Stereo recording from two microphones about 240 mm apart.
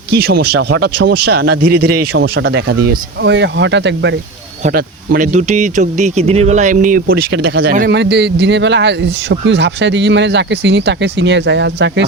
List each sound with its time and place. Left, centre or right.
0.1 s speech: right
1.8 s a man's voice: right
2.2 s speech: right
4.6 s speech: right